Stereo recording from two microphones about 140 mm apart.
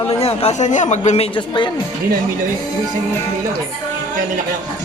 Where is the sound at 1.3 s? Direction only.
35° left (ahead or behind).